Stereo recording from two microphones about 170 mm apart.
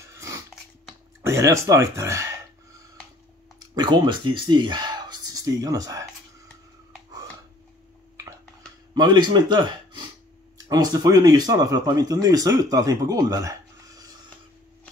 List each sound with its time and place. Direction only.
0.1 s a sound: 15° right (ahead or behind)
1.2 s speech: 15° right (ahead or behind)
3.5 s speech: 25° right (ahead or behind)
8.9 s speech: 25° right (ahead or behind)